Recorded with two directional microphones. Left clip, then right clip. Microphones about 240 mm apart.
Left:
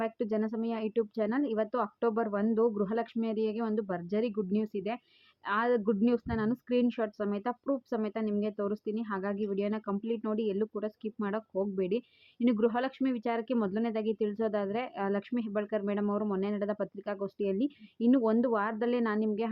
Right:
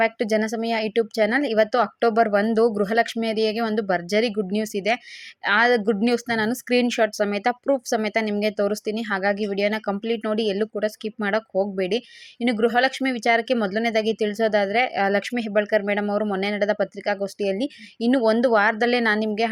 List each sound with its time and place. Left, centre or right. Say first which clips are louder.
0.0 s speech: right 11 dB; centre